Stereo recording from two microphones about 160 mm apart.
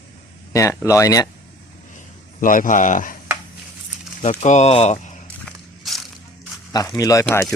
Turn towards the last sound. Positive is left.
turn(degrees=15)  # may be behind; listen again after turning